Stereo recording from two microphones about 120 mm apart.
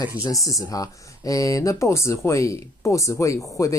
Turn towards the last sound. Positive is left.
turn(degrees=25)  # may be behind; listen again after turning